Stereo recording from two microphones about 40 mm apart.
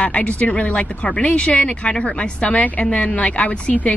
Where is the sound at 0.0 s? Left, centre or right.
Left.